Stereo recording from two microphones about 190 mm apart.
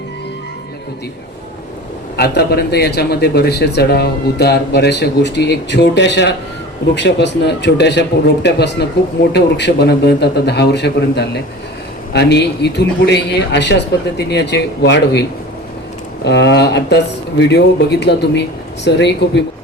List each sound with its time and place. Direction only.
2.1 s a man's voice: 55° left (ahead or behind)
16.2 s a man's voice: 65° left (ahead or behind)